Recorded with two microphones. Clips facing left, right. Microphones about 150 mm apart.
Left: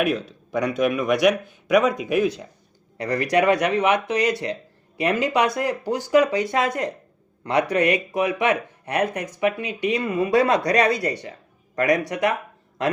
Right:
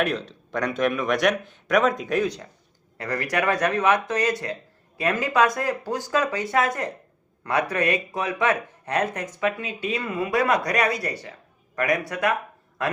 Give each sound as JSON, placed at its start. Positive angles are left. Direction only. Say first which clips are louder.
{"t": 0.0, "sound": "speech", "louder": "left 2 dB", "side_deg": 5}
{"t": 3.0, "sound": "speech", "louder": "left 5 dB", "side_deg": 20}